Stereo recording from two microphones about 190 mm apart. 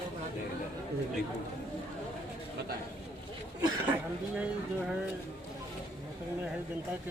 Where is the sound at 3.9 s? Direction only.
10° right (ahead or behind).